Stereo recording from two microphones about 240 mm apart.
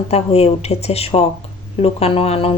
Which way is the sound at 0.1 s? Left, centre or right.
Left.